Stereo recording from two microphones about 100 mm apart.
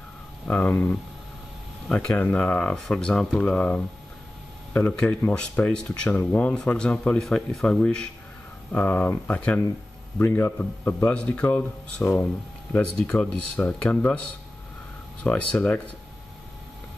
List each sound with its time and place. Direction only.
0.5 s speech: 15° left (ahead or behind)
15.2 s speech: 15° left (ahead or behind)